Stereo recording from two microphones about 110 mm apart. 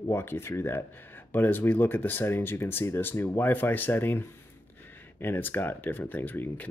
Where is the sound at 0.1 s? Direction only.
20° left (ahead or behind).